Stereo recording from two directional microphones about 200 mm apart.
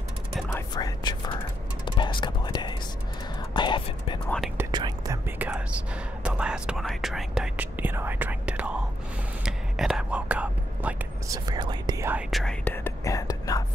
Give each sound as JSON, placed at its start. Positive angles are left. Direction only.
{"t": 0.5, "sound": "whispering", "side_deg": 15}
{"t": 4.6, "sound": "whispering", "side_deg": -20}
{"t": 5.5, "sound": "speech", "side_deg": -5}
{"t": 9.4, "sound": "whispering", "side_deg": 0}
{"t": 11.2, "sound": "speech", "side_deg": -20}
{"t": 12.1, "sound": "whispering", "side_deg": -5}